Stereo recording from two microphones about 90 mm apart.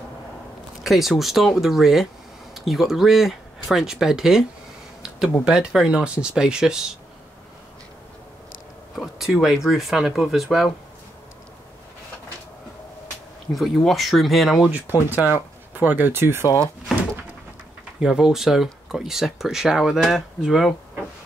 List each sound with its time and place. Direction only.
0.8 s speech: centre (ahead or behind)
8.9 s speech: centre (ahead or behind)
13.5 s speech: centre (ahead or behind)
14.7 s speech: 20° right (ahead or behind)
16.4 s speech: 40° left (ahead or behind)
18.0 s speech: 5° right (ahead or behind)